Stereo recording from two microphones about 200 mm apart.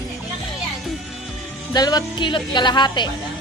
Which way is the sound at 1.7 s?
20° left (ahead or behind).